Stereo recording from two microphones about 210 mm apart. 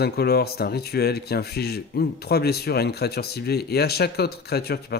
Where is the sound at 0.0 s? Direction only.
50° left (ahead or behind).